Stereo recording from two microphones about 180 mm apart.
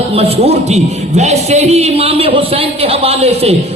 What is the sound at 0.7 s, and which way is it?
A man's voice, 40° right (ahead or behind).